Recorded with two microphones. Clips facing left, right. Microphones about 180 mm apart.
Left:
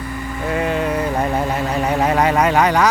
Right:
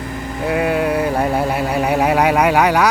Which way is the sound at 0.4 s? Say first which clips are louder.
Right 3 dB; 10° right (ahead or behind).